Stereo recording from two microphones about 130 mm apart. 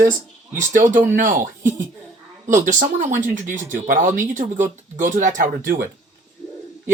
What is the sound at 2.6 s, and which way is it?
Speech, 85° right.